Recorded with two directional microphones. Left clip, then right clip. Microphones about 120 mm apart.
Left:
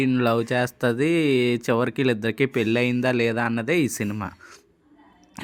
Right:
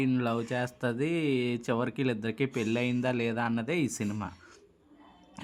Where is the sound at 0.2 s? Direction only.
40° left (ahead or behind).